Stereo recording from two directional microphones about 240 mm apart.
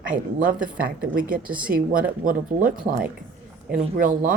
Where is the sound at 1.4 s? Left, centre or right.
Centre.